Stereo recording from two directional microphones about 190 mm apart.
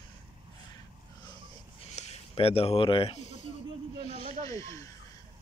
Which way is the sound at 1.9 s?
35° left (ahead or behind).